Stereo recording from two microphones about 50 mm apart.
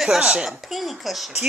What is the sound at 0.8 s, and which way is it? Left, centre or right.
Speech, centre.